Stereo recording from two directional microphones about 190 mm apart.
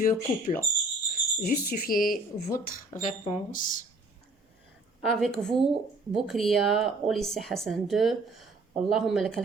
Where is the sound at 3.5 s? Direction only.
45° left (ahead or behind).